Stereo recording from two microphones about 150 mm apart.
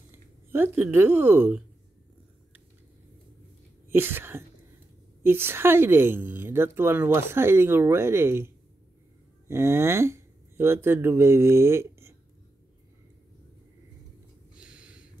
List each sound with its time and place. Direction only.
0.1 s speech: 15° right (ahead or behind)
3.9 s speech: 15° right (ahead or behind)
9.5 s speech: 15° right (ahead or behind)
14.6 s a sound: 5° right (ahead or behind)